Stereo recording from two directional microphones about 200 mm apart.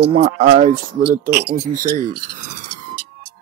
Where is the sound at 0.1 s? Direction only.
30° right (ahead or behind).